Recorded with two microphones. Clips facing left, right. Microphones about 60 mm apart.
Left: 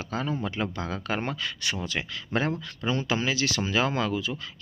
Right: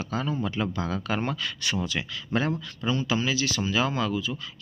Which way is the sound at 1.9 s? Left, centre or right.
Left.